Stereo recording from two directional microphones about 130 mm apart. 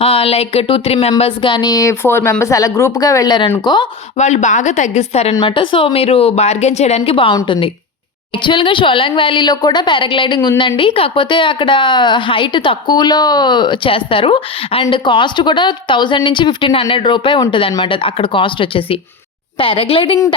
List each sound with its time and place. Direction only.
0.0 s a woman's voice: 45° left (ahead or behind)
4.2 s a woman's voice: 65° left (ahead or behind); by 20.1 s 45° left (ahead or behind)